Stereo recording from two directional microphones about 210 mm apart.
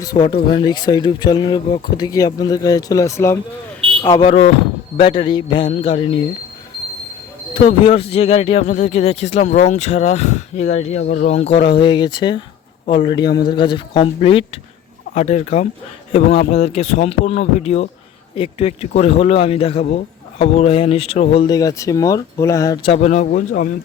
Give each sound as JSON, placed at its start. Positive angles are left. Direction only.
{"t": 0.0, "sound": "speech", "side_deg": 20}
{"t": 7.5, "sound": "speech", "side_deg": 25}